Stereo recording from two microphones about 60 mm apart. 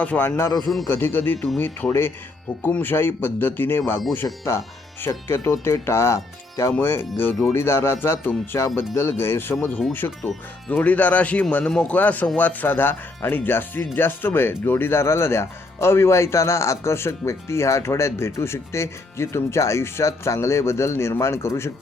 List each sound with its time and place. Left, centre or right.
0.2 s a man's voice: left
1.9 s a man's voice: left
6.7 s a man's voice: left
10.0 s speech: left
10.7 s speech: left